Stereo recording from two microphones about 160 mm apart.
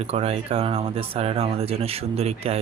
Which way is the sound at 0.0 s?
40° right (ahead or behind).